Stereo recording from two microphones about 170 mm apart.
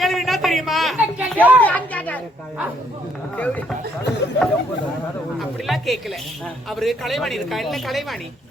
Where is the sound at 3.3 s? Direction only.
10° left (ahead or behind).